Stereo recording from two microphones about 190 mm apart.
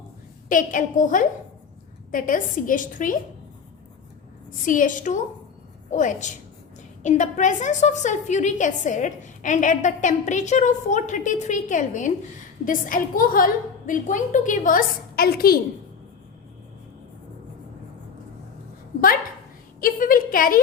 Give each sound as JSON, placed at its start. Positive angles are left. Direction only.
{"t": 0.4, "sound": "a woman's voice", "side_deg": 45}
{"t": 4.6, "sound": "a woman's voice", "side_deg": 45}
{"t": 19.8, "sound": "a sound", "side_deg": 50}